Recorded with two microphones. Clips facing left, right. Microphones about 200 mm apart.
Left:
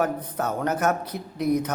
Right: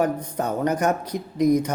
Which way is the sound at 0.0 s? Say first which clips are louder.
Right 2 dB; 15° right (ahead or behind).